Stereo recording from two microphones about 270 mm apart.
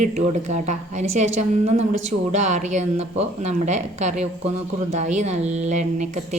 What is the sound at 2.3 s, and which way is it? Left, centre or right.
Speech, right.